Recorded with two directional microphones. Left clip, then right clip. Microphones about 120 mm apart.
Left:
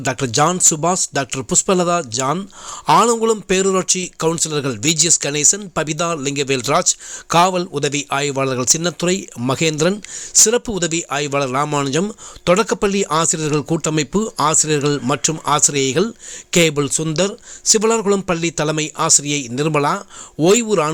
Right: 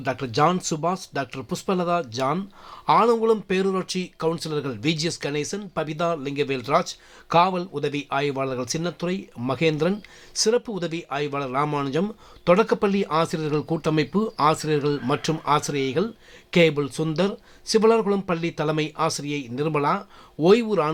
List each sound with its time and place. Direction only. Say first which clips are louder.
0.0 s speech: left 5 dB; 45° left (ahead or behind)